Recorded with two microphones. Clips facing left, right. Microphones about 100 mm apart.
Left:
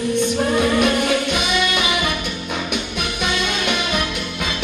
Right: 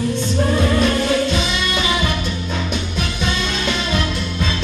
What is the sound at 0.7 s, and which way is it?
Music, 15° left (ahead or behind).